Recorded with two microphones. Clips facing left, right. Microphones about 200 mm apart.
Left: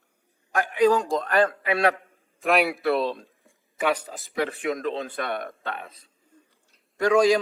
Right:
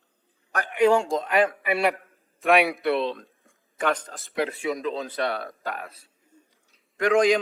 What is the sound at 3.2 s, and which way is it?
Speech, 15° left (ahead or behind).